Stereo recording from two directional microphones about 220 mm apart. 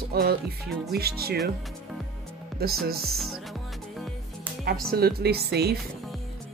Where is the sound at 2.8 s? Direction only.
45° right (ahead or behind).